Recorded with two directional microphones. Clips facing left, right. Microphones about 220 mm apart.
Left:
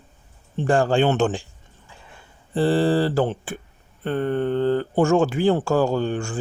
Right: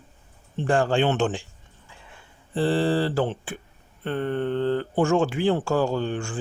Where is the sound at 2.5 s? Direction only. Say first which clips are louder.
Left 3 dB; 40° left (ahead or behind).